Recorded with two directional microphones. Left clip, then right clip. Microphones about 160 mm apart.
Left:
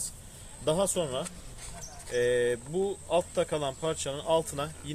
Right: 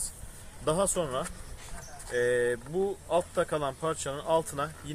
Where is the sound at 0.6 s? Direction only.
10° left (ahead or behind).